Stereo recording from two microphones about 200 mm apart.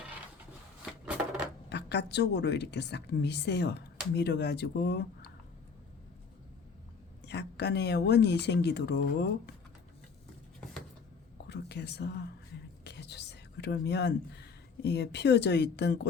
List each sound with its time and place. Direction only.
1.7 s a woman's voice: 55° left (ahead or behind)
7.3 s a woman's voice: 55° left (ahead or behind)
11.4 s whispering: 55° left (ahead or behind)
14.8 s a woman's voice: 55° left (ahead or behind)